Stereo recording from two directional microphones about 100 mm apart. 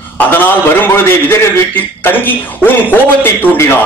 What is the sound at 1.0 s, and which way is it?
A man's voice, 25° left (ahead or behind).